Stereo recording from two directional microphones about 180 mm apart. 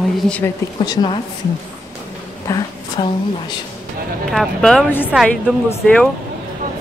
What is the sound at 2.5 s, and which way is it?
Speech, 15° left (ahead or behind).